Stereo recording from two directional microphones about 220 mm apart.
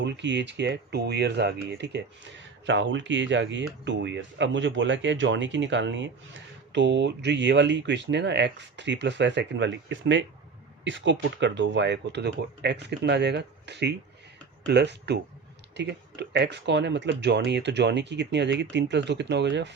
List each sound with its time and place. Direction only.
0.0 s speech: 55° right (ahead or behind)